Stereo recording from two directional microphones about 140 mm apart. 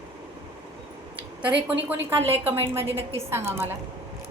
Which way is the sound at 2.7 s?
15° right (ahead or behind).